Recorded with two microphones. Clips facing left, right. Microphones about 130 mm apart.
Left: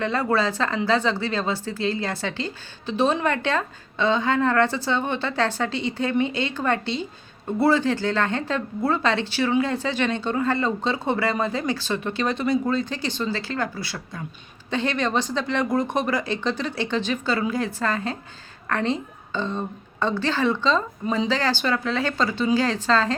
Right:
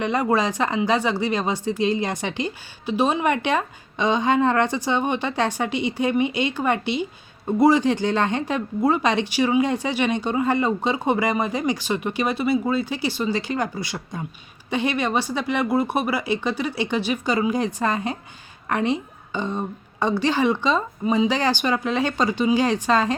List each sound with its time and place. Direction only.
0.0 s speech: 15° right (ahead or behind)